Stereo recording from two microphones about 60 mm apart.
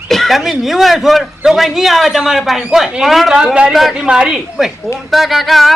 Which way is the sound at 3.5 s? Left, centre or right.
Centre.